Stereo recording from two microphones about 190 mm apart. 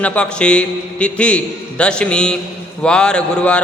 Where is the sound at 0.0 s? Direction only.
5° left (ahead or behind).